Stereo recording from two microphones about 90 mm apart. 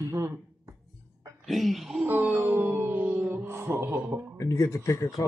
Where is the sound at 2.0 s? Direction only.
20° right (ahead or behind).